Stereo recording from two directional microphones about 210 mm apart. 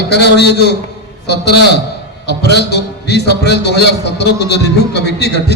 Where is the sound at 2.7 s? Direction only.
50° left (ahead or behind).